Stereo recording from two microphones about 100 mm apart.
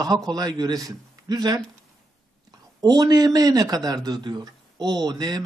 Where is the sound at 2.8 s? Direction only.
40° right (ahead or behind).